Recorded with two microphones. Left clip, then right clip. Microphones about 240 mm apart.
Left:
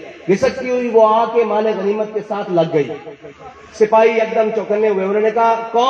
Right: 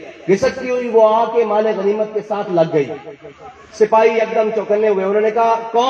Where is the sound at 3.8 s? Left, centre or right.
Right.